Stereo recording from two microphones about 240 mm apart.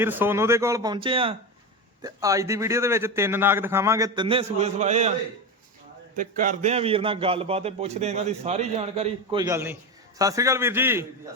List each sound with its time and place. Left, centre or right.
0.0 s a man's voice: centre; by 5.1 s right
6.1 s a man's voice: right; by 11.0 s centre